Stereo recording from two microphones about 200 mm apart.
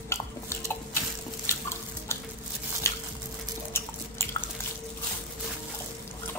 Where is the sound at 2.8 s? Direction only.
15° left (ahead or behind).